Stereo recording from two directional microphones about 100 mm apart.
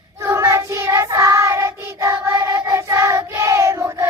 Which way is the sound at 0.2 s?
30° right (ahead or behind).